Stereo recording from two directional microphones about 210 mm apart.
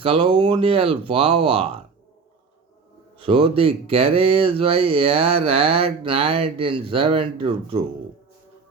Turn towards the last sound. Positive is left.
turn(degrees=-25)  # may be behind; listen again after turning